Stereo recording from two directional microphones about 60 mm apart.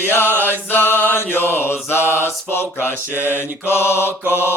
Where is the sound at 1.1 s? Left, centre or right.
Left.